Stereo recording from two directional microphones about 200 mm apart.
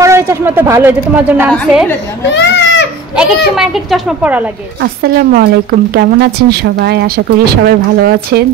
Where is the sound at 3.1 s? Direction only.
Centre (ahead or behind).